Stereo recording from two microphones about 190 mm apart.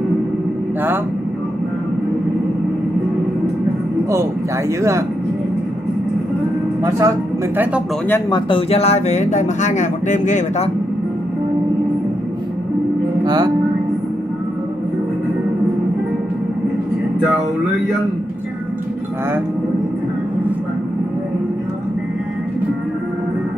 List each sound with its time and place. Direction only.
6.8 s speech: 15° right (ahead or behind)
8.3 s speech: 25° left (ahead or behind)
13.2 s speech: 20° right (ahead or behind)